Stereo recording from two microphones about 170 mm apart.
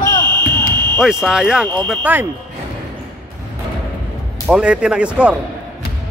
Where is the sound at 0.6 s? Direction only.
25° right (ahead or behind).